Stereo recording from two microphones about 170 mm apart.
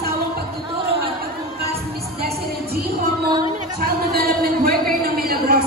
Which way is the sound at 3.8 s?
60° right (ahead or behind).